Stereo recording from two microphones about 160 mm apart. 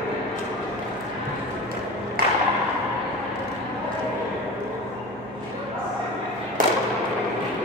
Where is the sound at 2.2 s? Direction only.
65° right (ahead or behind).